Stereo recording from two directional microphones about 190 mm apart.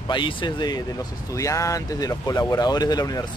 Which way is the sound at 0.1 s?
25° left (ahead or behind).